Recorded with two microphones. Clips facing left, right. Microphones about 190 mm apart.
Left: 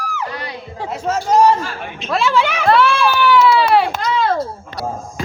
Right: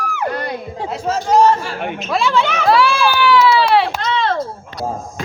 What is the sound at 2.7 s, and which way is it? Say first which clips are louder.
Run: even; 5° right (ahead or behind).